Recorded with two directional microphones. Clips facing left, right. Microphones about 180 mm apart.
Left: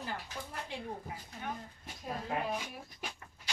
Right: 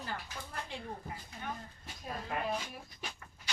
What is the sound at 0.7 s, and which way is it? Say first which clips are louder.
Speech: left 2 dB; 10° left (ahead or behind).